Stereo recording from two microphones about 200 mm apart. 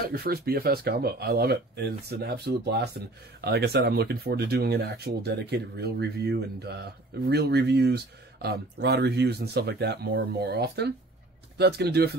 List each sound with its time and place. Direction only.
0.0 s speech: 50° right (ahead or behind)